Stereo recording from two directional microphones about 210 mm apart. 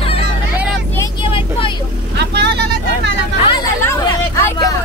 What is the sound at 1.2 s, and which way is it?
Vehicle, 25° left (ahead or behind).